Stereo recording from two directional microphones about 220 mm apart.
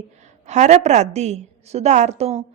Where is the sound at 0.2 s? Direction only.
30° right (ahead or behind).